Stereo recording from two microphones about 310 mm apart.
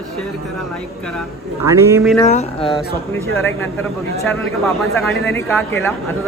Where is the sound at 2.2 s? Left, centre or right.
Left.